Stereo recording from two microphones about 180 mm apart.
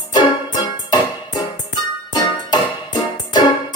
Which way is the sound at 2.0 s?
20° left (ahead or behind).